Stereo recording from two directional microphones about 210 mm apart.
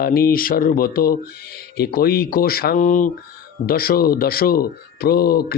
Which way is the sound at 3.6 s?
45° left (ahead or behind).